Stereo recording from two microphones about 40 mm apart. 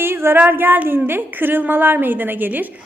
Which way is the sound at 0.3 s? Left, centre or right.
Right.